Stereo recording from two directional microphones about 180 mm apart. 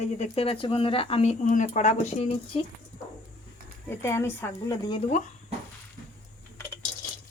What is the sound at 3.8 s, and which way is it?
Speech, 15° left (ahead or behind).